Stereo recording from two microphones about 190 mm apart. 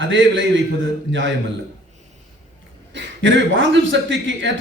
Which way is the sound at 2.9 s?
70° right (ahead or behind).